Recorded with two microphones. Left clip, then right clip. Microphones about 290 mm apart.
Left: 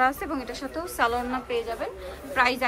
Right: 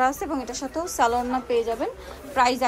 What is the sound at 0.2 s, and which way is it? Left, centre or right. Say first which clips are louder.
A woman's voice: right 3 dB; centre.